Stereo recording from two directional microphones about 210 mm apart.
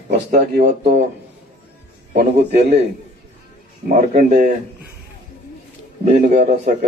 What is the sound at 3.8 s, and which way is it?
Speech, 40° right (ahead or behind).